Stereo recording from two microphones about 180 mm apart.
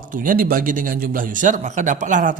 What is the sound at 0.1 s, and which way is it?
Speech, 50° right (ahead or behind).